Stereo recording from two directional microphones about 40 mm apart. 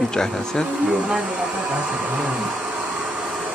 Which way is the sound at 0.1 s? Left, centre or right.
Centre.